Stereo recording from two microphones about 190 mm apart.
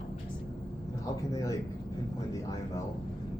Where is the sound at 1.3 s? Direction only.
15° left (ahead or behind).